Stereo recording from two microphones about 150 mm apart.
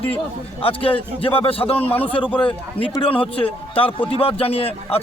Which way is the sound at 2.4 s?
35° left (ahead or behind).